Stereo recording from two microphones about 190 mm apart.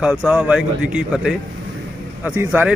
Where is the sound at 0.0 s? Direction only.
5° right (ahead or behind).